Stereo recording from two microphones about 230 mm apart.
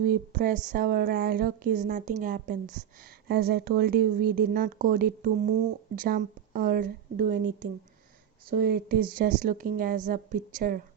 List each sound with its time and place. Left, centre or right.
0.0 s speech: right